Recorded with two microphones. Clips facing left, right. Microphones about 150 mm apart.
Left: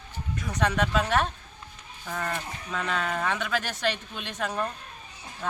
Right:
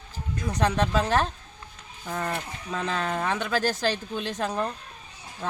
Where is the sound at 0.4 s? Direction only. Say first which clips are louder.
Right 2 dB; 30° right (ahead or behind).